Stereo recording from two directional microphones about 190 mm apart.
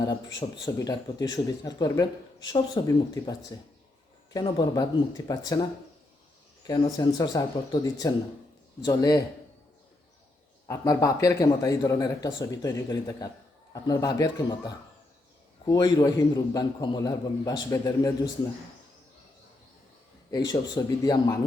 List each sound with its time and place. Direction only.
0.0 s speech: 20° left (ahead or behind)
6.7 s speech: 20° left (ahead or behind)
10.7 s speech: 15° left (ahead or behind)
20.5 s speech: 20° left (ahead or behind)